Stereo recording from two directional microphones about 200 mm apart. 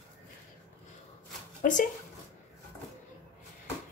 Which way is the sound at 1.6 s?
45° left (ahead or behind).